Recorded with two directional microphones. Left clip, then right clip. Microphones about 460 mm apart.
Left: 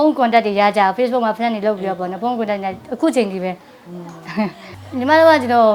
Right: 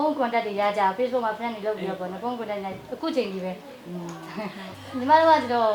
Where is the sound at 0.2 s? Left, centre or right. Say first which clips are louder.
Left 10 dB; left.